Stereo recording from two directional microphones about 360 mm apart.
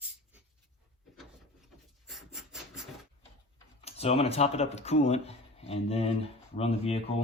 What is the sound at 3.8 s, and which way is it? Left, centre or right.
Speech, centre.